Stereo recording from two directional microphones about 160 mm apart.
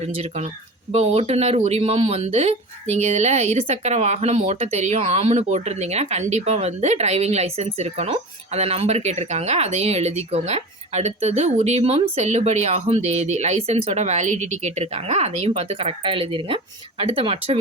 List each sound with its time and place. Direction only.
0.0 s speech: 40° right (ahead or behind)